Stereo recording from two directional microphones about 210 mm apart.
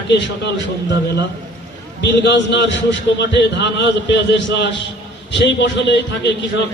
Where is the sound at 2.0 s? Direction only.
55° left (ahead or behind).